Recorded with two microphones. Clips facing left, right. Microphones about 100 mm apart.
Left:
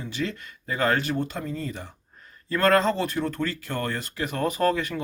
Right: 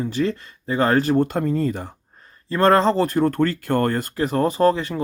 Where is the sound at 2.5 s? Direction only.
30° right (ahead or behind).